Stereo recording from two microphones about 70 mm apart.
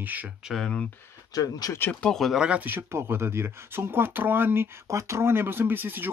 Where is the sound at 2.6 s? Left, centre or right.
Right.